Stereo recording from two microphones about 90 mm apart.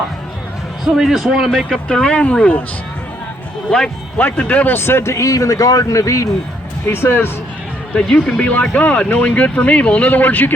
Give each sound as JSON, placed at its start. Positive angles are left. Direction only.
{"t": 0.9, "sound": "a man's voice", "side_deg": -5}
{"t": 1.5, "sound": "speech", "side_deg": 10}
{"t": 3.7, "sound": "speech", "side_deg": 10}
{"t": 6.8, "sound": "speech", "side_deg": 25}
{"t": 7.9, "sound": "speech", "side_deg": 10}